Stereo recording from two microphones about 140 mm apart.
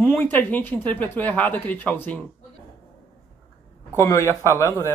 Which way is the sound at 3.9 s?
20° left (ahead or behind).